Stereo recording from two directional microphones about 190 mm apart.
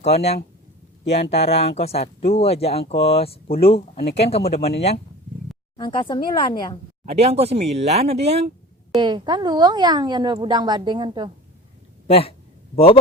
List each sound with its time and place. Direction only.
0.0 s speech: 35° left (ahead or behind)
1.5 s speech: 35° left (ahead or behind)
7.0 s a woman's voice: 30° right (ahead or behind)
12.0 s speech: 30° left (ahead or behind)